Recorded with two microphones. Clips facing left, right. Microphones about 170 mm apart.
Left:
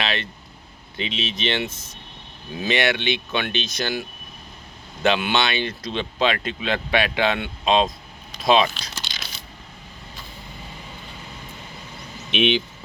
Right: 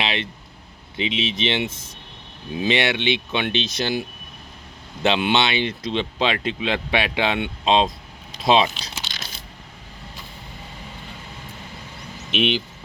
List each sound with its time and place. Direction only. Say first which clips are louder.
0.0 s vehicle: right 1 dB; 25° right (ahead or behind)
0.9 s speech: right 4 dB; 20° right (ahead or behind)
5.0 s speech: right 1 dB; 25° right (ahead or behind)
12.3 s speech: left 2 dB; 5° right (ahead or behind)